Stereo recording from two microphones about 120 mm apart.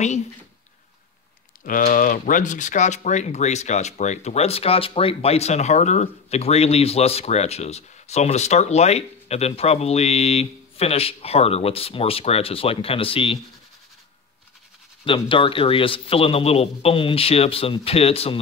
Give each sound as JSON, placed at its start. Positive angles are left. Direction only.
{"t": 1.6, "sound": "speech", "side_deg": 90}
{"t": 15.0, "sound": "a man's voice", "side_deg": 45}